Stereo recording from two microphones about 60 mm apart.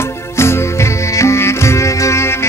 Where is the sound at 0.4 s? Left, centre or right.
Left.